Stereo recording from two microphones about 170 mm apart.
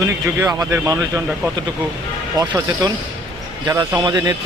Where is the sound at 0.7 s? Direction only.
20° right (ahead or behind).